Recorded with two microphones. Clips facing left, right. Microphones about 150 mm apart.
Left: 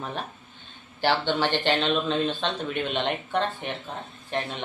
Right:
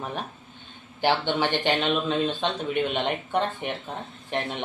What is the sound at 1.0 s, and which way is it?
Speech, 15° right (ahead or behind).